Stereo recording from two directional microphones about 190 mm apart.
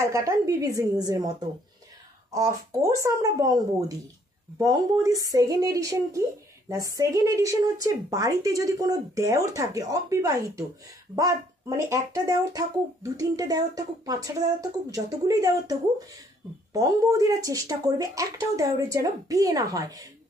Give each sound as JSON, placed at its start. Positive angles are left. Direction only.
{"t": 0.0, "sound": "speech", "side_deg": -15}
{"t": 2.3, "sound": "speech", "side_deg": -15}